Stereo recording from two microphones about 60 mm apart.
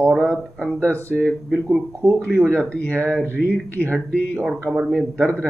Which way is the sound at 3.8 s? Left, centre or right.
Right.